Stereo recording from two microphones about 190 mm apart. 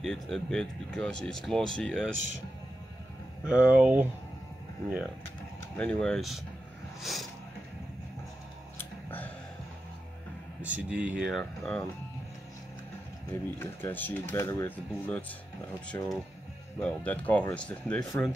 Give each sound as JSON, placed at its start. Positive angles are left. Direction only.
{"t": 0.0, "sound": "speech", "side_deg": 0}
{"t": 3.4, "sound": "speech", "side_deg": -5}
{"t": 5.8, "sound": "speech", "side_deg": 5}
{"t": 8.7, "sound": "a sound", "side_deg": 10}
{"t": 10.6, "sound": "speech", "side_deg": -5}
{"t": 13.3, "sound": "speech", "side_deg": 10}